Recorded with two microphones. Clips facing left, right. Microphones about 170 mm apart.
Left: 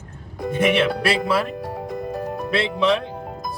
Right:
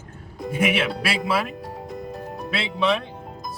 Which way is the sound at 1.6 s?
80° left.